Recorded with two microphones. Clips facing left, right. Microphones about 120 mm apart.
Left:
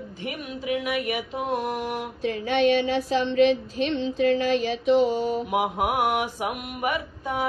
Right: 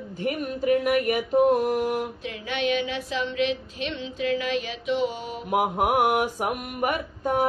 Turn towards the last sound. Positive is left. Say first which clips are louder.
# right 3 dB
turn(degrees=-45)  # may be behind; listen again after turning